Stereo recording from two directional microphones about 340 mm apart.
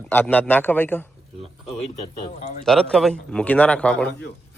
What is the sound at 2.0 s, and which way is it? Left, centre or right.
Speech, left.